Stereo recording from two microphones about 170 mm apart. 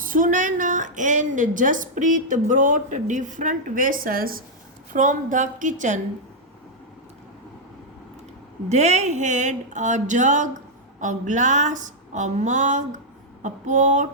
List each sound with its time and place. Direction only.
0.0 s a woman's voice: 50° right (ahead or behind)
4.9 s a woman's voice: 50° right (ahead or behind)
8.7 s a woman's voice: 40° right (ahead or behind)